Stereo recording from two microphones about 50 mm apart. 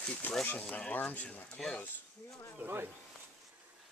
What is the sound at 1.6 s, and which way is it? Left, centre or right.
Speech, centre.